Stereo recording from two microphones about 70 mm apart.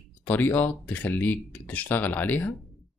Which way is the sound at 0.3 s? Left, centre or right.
Left.